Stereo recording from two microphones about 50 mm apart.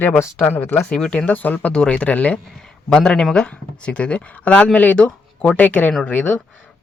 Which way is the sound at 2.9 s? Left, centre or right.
Centre.